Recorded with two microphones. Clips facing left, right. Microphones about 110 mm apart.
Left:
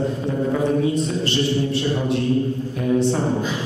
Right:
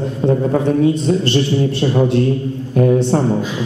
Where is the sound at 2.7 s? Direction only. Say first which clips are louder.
Right 7 dB; 50° right (ahead or behind).